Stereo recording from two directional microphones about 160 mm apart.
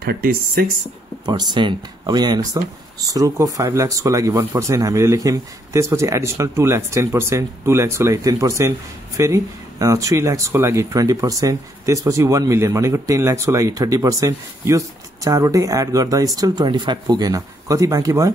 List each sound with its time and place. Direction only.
0.0 s speech: 70° right (ahead or behind)
1.2 s speech: 25° right (ahead or behind)